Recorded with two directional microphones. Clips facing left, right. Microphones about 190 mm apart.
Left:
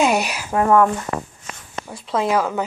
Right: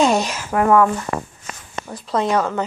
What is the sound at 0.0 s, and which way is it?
Speech, 10° left (ahead or behind).